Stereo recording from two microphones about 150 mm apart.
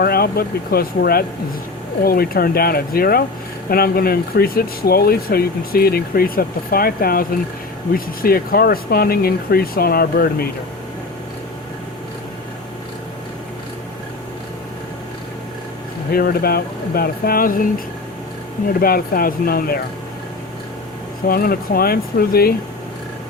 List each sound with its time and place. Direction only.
0.0 s speech: 90° left
16.1 s speech: 90° left; by 17.7 s 70° left (ahead or behind)
18.7 s speech: 80° left
21.2 s speech: 85° left